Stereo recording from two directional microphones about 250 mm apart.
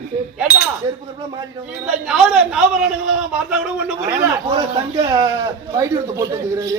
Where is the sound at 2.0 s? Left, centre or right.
Centre.